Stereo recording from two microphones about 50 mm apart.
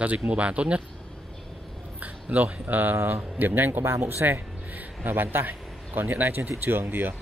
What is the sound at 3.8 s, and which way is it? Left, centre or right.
Speech, right.